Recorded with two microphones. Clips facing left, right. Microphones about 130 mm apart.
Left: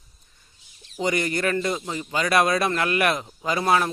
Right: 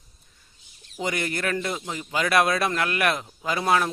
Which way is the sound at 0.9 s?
Centre (ahead or behind).